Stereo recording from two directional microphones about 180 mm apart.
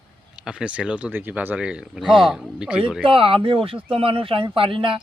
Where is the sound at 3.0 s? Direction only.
30° right (ahead or behind).